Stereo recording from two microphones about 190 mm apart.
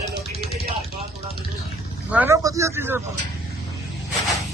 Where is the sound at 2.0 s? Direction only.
10° right (ahead or behind).